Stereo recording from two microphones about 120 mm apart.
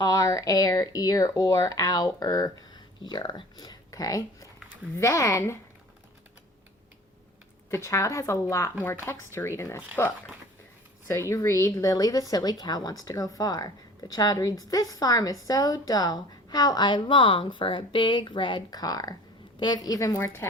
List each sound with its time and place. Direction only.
0.0 s speech: 30° left (ahead or behind)
7.7 s speech: 25° left (ahead or behind)
11.1 s speech: 25° left (ahead or behind)